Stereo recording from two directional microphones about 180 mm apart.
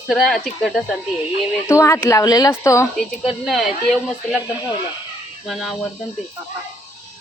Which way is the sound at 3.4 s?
Centre (ahead or behind).